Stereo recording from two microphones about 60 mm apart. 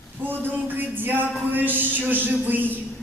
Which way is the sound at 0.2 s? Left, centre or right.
Right.